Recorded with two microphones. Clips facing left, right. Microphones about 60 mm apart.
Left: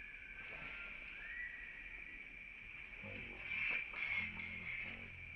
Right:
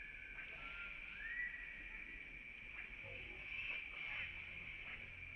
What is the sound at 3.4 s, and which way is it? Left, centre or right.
Music, left.